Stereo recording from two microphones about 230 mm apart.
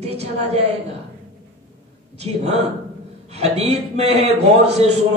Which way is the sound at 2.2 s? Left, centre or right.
Right.